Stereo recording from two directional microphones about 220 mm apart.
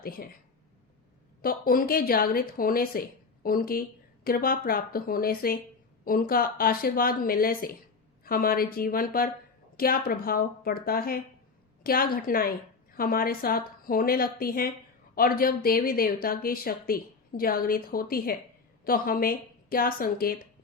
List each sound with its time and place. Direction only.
0.0 s a woman's voice: 40° left (ahead or behind)
1.4 s a woman's voice: 40° left (ahead or behind)